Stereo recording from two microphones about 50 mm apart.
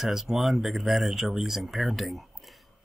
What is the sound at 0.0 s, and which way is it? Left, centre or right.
Speech, centre.